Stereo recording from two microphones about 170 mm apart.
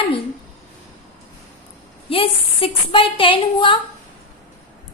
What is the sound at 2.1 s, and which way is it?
A woman's voice, 30° left (ahead or behind).